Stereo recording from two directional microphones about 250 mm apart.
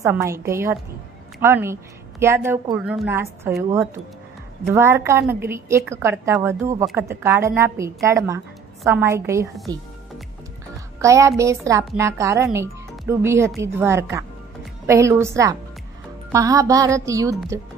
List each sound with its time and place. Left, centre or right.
0.0 s a woman's voice: centre
11.0 s a woman's voice: centre
12.4 s a woman's voice: centre